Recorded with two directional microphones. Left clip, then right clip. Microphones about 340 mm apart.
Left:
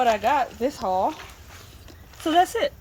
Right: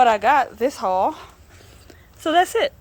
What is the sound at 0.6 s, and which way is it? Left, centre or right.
Speech, right.